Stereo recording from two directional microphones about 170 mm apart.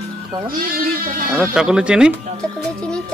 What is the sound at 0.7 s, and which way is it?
Speech, 55° right (ahead or behind).